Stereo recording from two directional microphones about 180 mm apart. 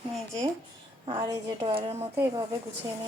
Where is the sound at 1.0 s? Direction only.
20° right (ahead or behind).